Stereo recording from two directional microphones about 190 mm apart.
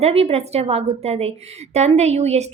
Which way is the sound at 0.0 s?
30° right (ahead or behind).